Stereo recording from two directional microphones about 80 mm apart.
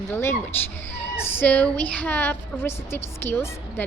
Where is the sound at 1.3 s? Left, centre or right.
Centre.